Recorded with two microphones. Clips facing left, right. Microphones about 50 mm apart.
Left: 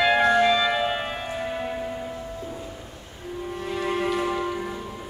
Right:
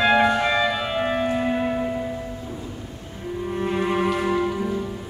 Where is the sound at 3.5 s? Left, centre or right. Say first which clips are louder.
Right 4 dB; right.